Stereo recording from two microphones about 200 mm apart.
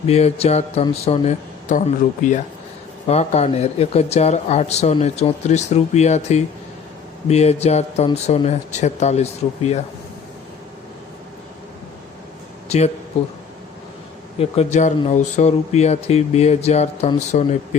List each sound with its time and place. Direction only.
0.1 s speech: 30° left (ahead or behind)
3.1 s speech: 30° left (ahead or behind)
12.6 s a sound: 35° left (ahead or behind)
13.2 s speech: 30° left (ahead or behind)
14.3 s speech: 30° left (ahead or behind)